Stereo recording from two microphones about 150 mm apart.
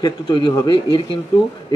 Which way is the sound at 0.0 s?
30° left (ahead or behind).